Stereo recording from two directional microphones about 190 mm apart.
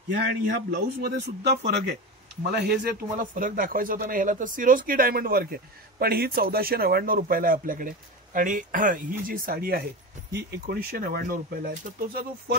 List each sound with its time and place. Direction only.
0.3 s speech: 60° right (ahead or behind)
2.5 s speech: 50° right (ahead or behind)